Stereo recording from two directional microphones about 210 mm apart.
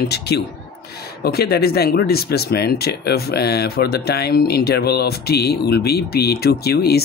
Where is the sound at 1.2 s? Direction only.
50° left (ahead or behind).